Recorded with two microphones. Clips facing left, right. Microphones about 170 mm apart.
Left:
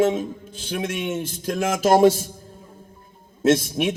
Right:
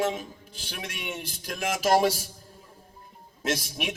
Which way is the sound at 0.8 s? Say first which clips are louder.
Left 11 dB; 50° left (ahead or behind).